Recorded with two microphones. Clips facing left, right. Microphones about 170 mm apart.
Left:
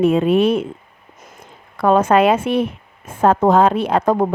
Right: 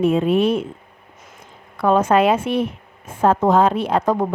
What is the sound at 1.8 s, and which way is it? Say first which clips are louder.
A woman's voice: left 2 dB; 60° left (ahead or behind).